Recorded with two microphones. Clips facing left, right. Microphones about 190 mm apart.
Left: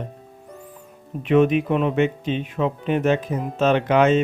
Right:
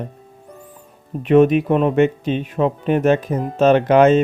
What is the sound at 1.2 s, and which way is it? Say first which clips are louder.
Speech: right 4 dB; 40° right (ahead or behind).